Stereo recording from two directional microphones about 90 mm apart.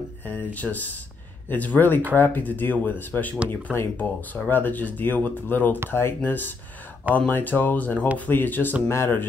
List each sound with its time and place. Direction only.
0.2 s speech: 20° left (ahead or behind)